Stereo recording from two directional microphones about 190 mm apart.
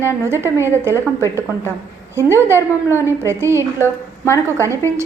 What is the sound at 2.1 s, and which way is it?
A woman's voice, 15° right (ahead or behind).